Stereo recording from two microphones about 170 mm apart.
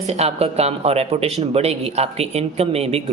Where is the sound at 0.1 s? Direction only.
40° right (ahead or behind).